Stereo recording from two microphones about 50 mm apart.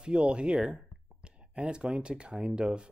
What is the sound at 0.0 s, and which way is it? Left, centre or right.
Speech, right.